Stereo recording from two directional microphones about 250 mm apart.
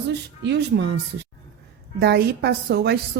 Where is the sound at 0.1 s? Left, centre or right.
Right.